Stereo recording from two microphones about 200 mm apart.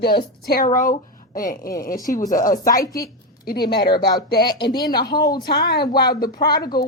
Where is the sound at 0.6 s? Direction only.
40° left (ahead or behind).